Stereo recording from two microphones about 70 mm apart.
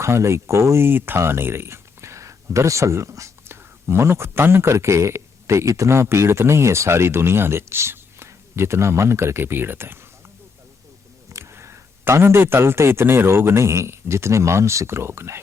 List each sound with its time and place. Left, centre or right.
0.0 s speech: right
11.3 s speech: right